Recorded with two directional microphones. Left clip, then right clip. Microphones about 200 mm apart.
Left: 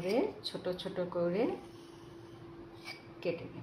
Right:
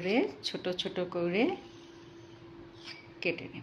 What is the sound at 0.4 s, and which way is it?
Speech, 50° right (ahead or behind).